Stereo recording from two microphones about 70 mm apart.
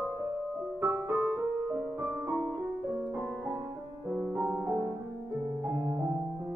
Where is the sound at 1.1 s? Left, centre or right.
Centre.